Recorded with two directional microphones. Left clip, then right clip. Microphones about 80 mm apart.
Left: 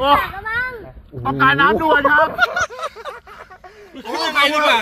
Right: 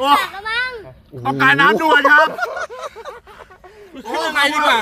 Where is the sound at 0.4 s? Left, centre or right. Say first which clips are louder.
Right 1 dB; left.